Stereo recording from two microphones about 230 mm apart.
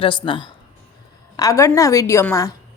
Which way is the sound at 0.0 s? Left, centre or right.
Left.